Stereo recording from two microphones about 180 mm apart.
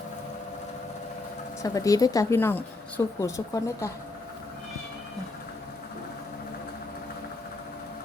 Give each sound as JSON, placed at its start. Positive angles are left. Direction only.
{"t": 1.6, "sound": "speech", "side_deg": 20}